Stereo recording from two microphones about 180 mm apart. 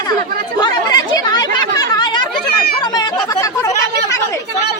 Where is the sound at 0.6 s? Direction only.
20° left (ahead or behind).